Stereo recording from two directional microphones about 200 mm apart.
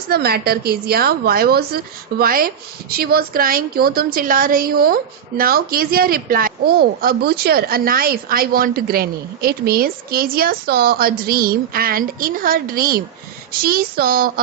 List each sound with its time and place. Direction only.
0.1 s a woman's voice: 50° right (ahead or behind)